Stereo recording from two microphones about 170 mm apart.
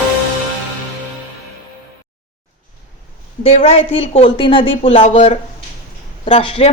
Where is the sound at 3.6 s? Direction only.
35° left (ahead or behind).